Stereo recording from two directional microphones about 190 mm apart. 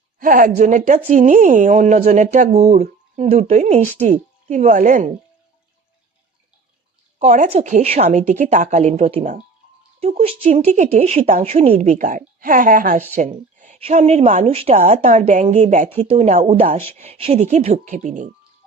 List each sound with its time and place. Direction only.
0.2 s speech: 45° right (ahead or behind)
7.2 s speech: 40° right (ahead or behind)
13.1 s a sound: 40° right (ahead or behind)
13.7 s speech: 35° right (ahead or behind)